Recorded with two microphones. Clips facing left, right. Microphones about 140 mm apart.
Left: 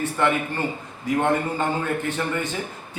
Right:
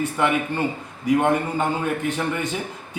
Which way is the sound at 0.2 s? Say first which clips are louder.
Right 1 dB; 15° right (ahead or behind).